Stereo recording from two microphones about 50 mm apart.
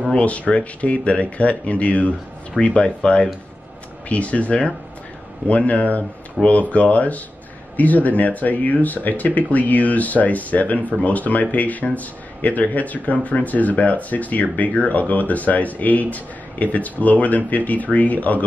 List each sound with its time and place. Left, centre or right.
0.1 s speech: left
6.4 s speech: centre
6.7 s speech: left